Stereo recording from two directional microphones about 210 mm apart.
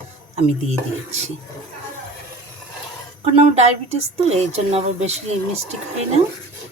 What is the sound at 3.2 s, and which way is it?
A woman's voice, 30° right (ahead or behind).